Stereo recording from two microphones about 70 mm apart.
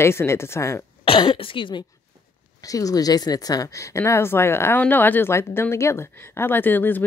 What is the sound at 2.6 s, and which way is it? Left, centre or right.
Speech, left.